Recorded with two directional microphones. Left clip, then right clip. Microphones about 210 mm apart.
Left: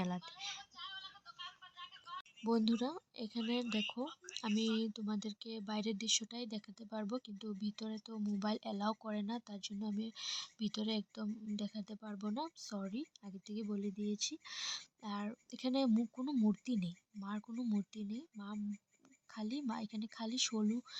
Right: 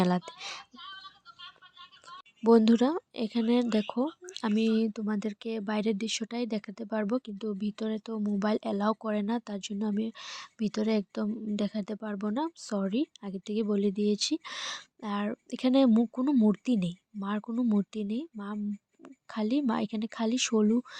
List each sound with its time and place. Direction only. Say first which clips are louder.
0.0 s speech: right 13 dB; 40° right (ahead or behind)
2.4 s speech: right 14 dB; 35° right (ahead or behind)